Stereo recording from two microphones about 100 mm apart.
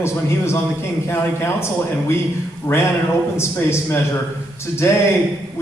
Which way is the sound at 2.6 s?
30° left (ahead or behind).